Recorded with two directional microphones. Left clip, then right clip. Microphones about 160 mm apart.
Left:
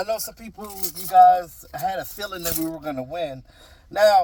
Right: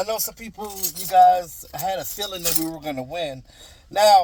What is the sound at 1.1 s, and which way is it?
Speech, 10° right (ahead or behind).